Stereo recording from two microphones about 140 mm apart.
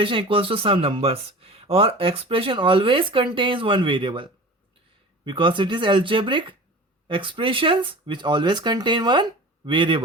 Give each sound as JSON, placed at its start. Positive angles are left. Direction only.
{"t": 0.0, "sound": "speech", "side_deg": -40}